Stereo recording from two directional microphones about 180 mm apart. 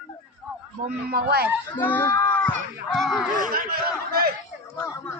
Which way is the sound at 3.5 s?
55° right (ahead or behind).